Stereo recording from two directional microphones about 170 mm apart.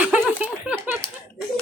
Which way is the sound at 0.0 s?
10° right (ahead or behind).